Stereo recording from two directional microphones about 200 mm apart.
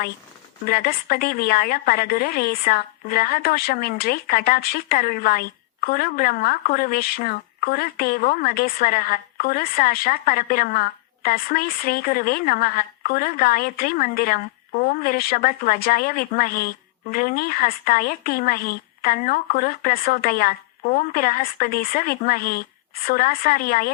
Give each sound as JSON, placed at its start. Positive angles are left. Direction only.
{"t": 0.6, "sound": "a woman's voice", "side_deg": 45}